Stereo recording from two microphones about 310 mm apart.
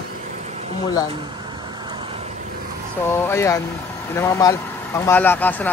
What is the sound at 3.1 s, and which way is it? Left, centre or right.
Speech, centre.